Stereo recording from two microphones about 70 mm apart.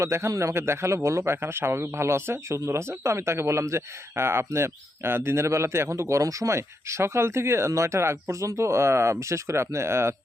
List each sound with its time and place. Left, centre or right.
0.0 s a man's voice: right